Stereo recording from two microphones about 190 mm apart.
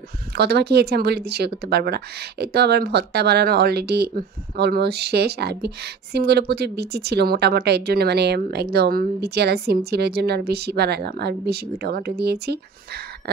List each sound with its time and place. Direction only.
0.4 s speech: 60° right (ahead or behind)